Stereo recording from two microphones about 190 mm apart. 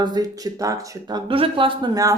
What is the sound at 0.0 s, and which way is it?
Speech, 20° right (ahead or behind).